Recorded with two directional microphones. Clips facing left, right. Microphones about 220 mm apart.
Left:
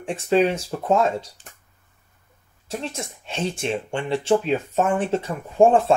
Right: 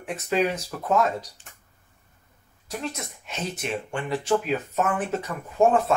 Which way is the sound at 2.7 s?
25° left (ahead or behind).